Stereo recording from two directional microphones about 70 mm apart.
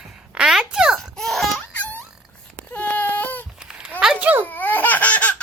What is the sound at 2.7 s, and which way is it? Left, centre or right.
Baby cry, left.